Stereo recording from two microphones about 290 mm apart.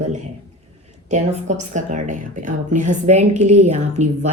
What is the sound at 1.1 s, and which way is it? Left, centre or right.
A woman's voice, right.